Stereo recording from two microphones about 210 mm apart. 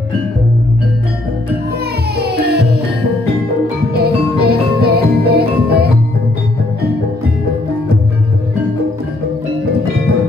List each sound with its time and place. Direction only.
2.1 s music: 50° right (ahead or behind)
3.9 s music: 50° right (ahead or behind)